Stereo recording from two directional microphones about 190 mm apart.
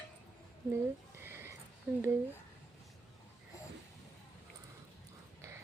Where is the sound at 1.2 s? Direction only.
10° right (ahead or behind).